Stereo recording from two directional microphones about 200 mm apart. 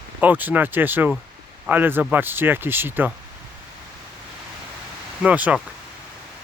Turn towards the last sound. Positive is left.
turn(degrees=-5)  # may be behind; listen again after turning